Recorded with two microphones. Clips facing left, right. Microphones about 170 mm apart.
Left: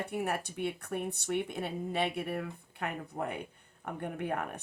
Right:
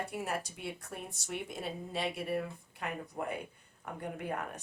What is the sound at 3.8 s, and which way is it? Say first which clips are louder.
Speech: left 3 dB; 65° left (ahead or behind).